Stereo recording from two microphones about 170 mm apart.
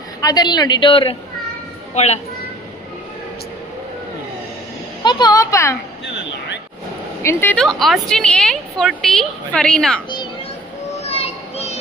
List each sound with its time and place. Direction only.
0.2 s a woman's voice: 20° left (ahead or behind)
5.0 s a woman's voice: 20° left (ahead or behind)
7.2 s speech: 15° left (ahead or behind)
11.0 s children playing: 35° left (ahead or behind)